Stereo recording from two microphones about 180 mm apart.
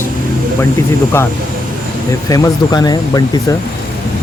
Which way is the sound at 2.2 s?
20° left (ahead or behind).